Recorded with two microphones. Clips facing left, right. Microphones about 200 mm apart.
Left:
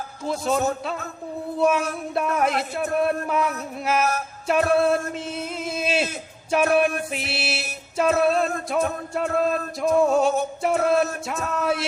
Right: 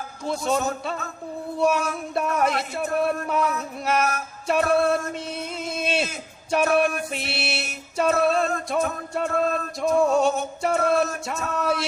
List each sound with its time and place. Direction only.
0.3 s music: centre (ahead or behind)
5.4 s a sound: centre (ahead or behind)
6.5 s music: centre (ahead or behind)